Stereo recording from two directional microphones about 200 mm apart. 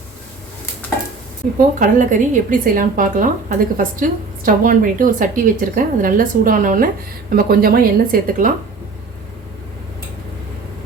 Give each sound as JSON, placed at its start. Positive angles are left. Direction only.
{"t": 1.8, "sound": "a woman's voice", "side_deg": -40}